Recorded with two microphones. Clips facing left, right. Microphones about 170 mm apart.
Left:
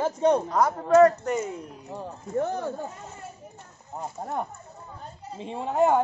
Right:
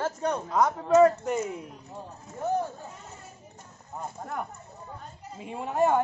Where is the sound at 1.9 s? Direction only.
85° left.